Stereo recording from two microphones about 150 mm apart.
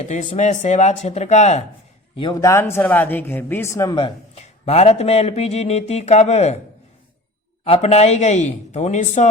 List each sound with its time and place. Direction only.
0.0 s speech: 55° left (ahead or behind)
2.1 s a man's voice: 30° left (ahead or behind)
2.4 s speech: 20° left (ahead or behind)
4.4 s speech: 45° left (ahead or behind)
7.6 s speech: 45° left (ahead or behind)